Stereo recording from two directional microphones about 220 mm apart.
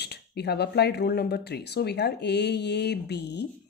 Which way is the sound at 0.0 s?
50° left (ahead or behind).